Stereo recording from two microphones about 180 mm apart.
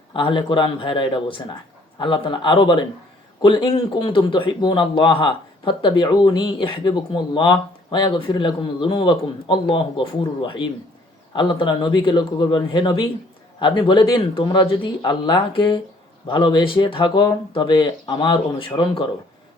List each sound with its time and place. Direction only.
0.1 s a man's voice: 30° left (ahead or behind)